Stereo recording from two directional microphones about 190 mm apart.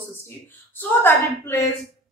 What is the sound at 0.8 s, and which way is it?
Speech, 10° left (ahead or behind).